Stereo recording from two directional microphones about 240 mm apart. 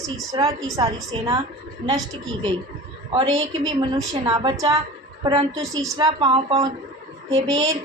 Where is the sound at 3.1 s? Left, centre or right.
Right.